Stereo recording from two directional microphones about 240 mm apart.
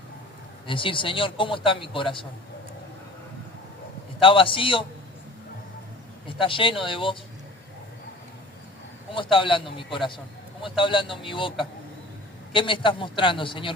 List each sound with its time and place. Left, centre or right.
0.7 s a man's voice: left
4.2 s a man's voice: left
6.2 s a man's voice: left
9.1 s a man's voice: left